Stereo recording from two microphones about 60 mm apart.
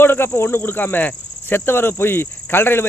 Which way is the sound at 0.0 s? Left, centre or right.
Left.